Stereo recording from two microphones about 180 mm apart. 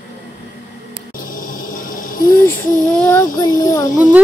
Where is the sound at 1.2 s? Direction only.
50° left (ahead or behind).